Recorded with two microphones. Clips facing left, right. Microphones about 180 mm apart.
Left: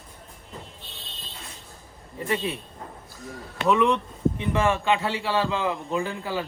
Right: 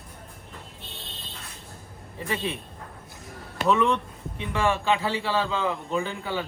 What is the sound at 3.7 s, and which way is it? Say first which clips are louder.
Speech: left 2 dB; 15° left (ahead or behind).